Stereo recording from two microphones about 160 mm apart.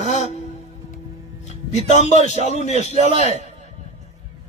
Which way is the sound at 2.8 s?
45° left (ahead or behind).